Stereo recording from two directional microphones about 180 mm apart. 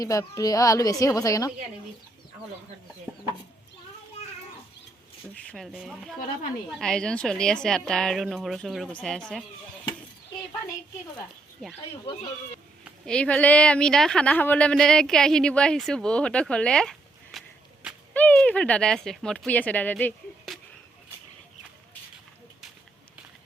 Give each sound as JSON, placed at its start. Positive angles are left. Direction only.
{"t": 0.0, "sound": "a woman's voice", "side_deg": 20}
{"t": 5.3, "sound": "speech", "side_deg": 5}
{"t": 11.6, "sound": "speech", "side_deg": 5}
{"t": 12.8, "sound": "speech", "side_deg": 5}